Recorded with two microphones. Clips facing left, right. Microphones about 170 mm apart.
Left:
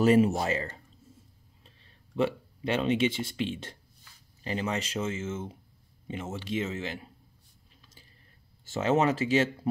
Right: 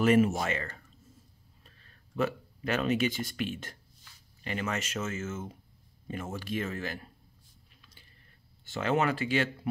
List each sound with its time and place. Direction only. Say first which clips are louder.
0.0 s speech: left 2 dB; 30° left (ahead or behind)
8.8 s speech: left 3 dB; 30° left (ahead or behind)